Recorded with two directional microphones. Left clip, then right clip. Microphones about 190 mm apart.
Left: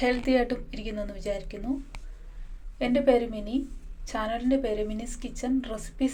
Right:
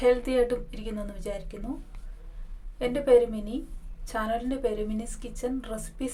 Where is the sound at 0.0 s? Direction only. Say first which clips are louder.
Right 2 dB; 5° right (ahead or behind).